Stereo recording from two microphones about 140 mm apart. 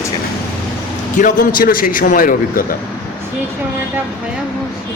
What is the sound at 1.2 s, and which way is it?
A man's voice, 70° left (ahead or behind).